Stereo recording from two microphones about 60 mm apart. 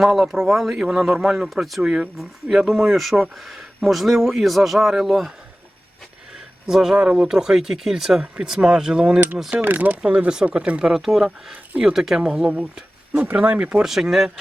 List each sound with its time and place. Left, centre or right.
0.0 s speech: centre
6.7 s speech: centre
9.6 s speech: right
10.0 s speech: centre
10.9 s speech: centre
13.3 s speech: right
13.8 s speech: centre